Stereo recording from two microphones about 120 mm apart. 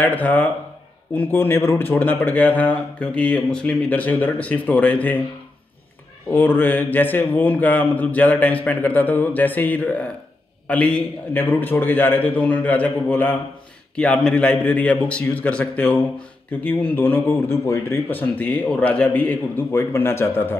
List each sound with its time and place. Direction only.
0.0 s speech: 15° left (ahead or behind)
6.3 s speech: 15° left (ahead or behind)